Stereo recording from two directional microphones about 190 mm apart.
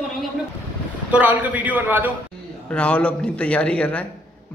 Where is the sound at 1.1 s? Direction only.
10° right (ahead or behind).